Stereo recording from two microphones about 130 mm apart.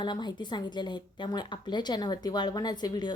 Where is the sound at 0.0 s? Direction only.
35° left (ahead or behind).